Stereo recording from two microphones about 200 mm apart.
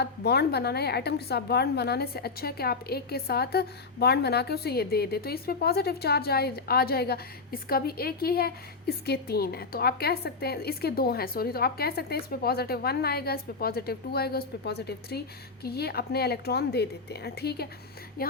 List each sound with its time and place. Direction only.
0.0 s a woman's voice: 55° left (ahead or behind)